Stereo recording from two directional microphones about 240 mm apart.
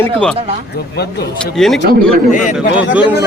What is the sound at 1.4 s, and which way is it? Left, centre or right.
Speech, centre.